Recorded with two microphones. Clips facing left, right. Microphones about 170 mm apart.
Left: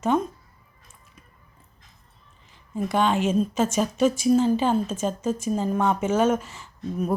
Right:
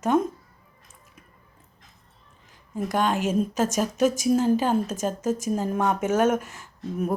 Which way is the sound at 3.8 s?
10° right (ahead or behind).